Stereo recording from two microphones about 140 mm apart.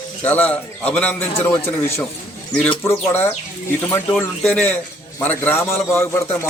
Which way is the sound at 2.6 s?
15° left (ahead or behind).